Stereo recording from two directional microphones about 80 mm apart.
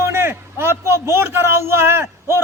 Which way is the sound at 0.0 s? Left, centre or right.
Right.